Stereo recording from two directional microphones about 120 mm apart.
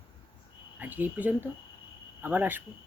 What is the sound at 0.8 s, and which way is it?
Speech, 15° right (ahead or behind).